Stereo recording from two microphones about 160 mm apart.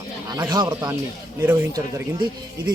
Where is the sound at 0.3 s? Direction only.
25° right (ahead or behind).